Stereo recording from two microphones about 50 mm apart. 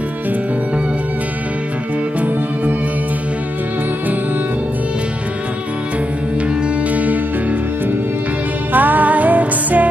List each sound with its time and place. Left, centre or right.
6.9 s music: right
8.7 s music: right